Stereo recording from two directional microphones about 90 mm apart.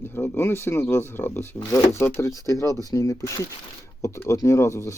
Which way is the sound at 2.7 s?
40° right (ahead or behind).